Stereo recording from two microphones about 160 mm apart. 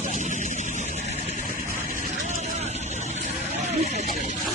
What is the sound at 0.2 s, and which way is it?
Vehicle, 50° right (ahead or behind).